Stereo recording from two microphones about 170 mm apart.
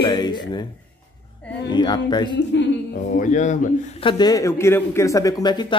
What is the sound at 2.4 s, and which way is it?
Speech, 90° left.